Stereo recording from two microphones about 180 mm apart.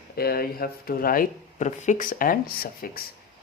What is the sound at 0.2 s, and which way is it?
Speech, 55° left (ahead or behind).